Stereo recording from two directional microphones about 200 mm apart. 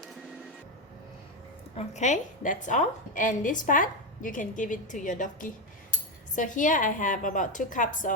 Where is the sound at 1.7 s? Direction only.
35° left (ahead or behind).